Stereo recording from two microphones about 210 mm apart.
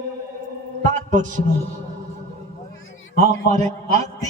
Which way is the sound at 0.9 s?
35° right (ahead or behind).